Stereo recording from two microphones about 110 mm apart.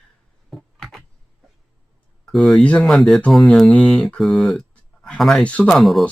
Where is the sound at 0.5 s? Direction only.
Centre (ahead or behind).